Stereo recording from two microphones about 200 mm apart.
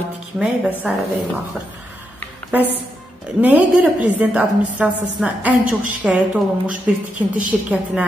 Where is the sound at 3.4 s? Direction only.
10° right (ahead or behind).